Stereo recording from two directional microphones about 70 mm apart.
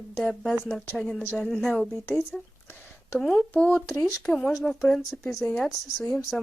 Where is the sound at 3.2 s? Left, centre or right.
Centre.